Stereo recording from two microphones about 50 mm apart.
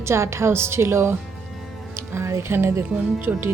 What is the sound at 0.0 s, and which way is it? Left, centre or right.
A woman's voice, right.